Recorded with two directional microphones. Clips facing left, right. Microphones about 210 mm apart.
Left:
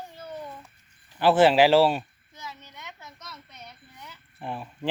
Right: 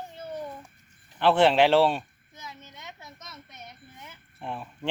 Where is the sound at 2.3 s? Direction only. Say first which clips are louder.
Left 2 dB; 20° right (ahead or behind).